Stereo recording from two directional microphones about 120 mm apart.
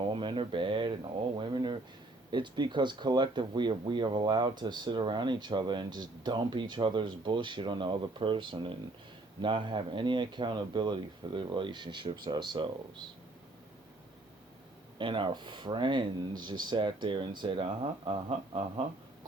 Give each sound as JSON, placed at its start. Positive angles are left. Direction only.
{"t": 0.1, "sound": "speech", "side_deg": -45}
{"t": 14.9, "sound": "speech", "side_deg": -45}